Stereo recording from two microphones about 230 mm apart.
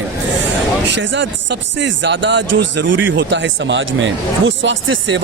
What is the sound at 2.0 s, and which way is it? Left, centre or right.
Speech, right.